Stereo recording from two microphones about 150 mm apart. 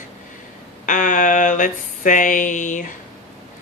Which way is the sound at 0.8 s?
60° left (ahead or behind).